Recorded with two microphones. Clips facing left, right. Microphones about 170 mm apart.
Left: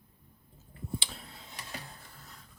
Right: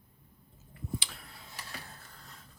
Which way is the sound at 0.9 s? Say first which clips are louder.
Left 5 dB; 25° left (ahead or behind).